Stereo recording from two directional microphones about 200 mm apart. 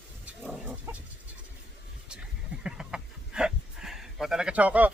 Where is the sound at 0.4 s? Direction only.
Centre (ahead or behind).